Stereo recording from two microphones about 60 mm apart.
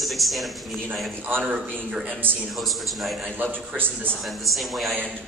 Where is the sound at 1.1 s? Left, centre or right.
Right.